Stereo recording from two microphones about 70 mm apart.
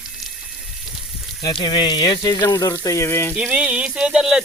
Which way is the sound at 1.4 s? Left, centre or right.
Left.